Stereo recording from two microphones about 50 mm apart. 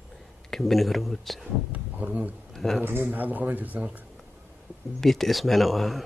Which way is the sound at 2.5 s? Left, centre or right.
Centre.